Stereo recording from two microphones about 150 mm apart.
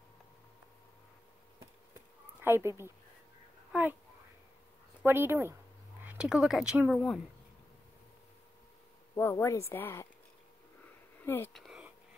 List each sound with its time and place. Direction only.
2.4 s speech: 15° right (ahead or behind)
5.0 s speech: 15° right (ahead or behind)
9.1 s a woman's voice: 20° left (ahead or behind)
11.2 s a woman's voice: 15° left (ahead or behind)
11.5 s a sound: centre (ahead or behind)